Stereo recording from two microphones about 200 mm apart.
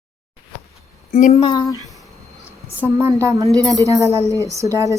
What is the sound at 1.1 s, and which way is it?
Speech, 40° left (ahead or behind).